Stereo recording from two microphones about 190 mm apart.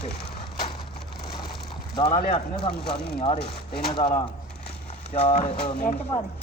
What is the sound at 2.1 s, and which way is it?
Speech, 45° left (ahead or behind).